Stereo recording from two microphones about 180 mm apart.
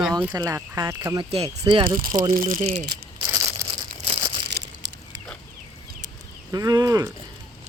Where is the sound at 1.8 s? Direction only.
50° right (ahead or behind).